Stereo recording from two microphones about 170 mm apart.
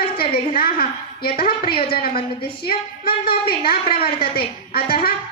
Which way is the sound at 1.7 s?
65° left (ahead or behind).